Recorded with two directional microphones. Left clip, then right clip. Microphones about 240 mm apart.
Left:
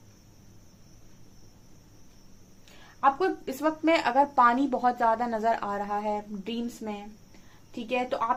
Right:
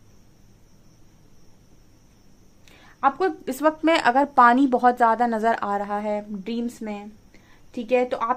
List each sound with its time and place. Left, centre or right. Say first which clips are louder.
3.0 s speech: right 3 dB; right